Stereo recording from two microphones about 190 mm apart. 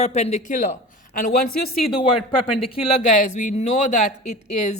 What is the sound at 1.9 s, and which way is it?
Speech, 30° left (ahead or behind).